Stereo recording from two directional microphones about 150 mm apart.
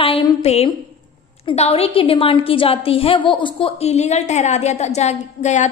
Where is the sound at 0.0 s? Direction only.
40° left (ahead or behind).